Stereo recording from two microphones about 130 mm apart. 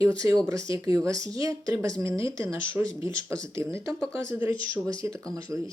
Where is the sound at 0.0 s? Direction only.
25° right (ahead or behind).